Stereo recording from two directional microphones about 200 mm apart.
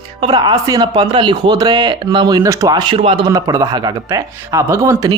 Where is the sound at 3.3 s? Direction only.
15° right (ahead or behind).